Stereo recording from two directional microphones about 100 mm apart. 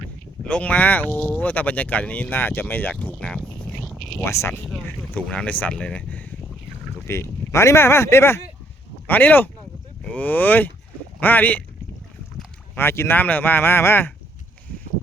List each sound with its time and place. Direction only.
0.4 s speech: 15° left (ahead or behind)
1.1 s speech: 5° right (ahead or behind)
1.4 s speech: 15° left (ahead or behind)
3.8 s a sound: centre (ahead or behind)
4.2 s speech: 25° left (ahead or behind)
4.6 s speech: centre (ahead or behind)
5.1 s speech: 15° left (ahead or behind)
7.1 s speech: 25° left (ahead or behind)
12.7 s speech: 25° left (ahead or behind)